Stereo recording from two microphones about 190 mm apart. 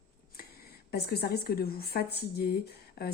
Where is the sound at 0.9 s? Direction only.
55° left (ahead or behind).